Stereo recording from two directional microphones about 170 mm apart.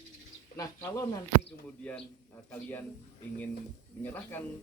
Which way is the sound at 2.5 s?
10° left (ahead or behind).